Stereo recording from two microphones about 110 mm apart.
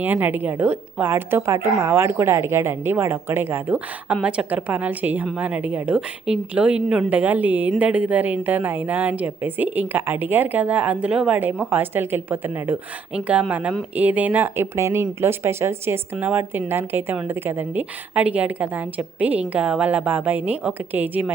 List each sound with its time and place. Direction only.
0.0 s a woman's voice: 15° right (ahead or behind)